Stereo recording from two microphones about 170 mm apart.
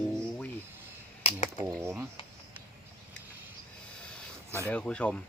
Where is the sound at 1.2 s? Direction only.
40° left (ahead or behind).